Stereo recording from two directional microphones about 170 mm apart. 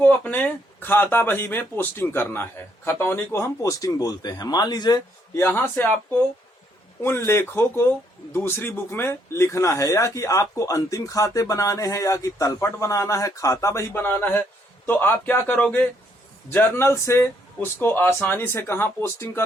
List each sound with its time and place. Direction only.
0.0 s speech: 10° left (ahead or behind)
5.4 s speech: 10° left (ahead or behind)